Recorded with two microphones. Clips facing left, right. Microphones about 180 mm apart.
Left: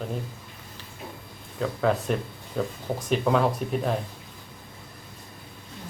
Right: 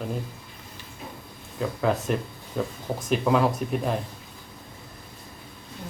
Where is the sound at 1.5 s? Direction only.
Centre (ahead or behind).